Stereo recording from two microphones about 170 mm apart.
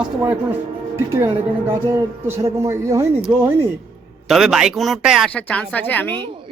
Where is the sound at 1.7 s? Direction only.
15° right (ahead or behind).